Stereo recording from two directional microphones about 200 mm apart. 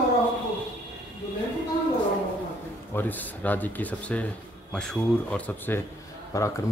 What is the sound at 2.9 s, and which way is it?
Speech, 10° left (ahead or behind).